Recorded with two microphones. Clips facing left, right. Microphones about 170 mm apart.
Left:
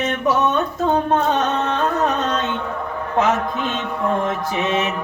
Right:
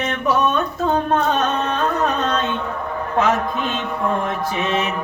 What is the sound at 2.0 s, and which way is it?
Carnatic music, 20° left (ahead or behind).